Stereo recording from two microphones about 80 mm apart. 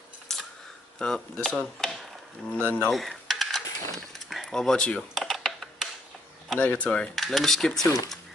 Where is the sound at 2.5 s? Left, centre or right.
Centre.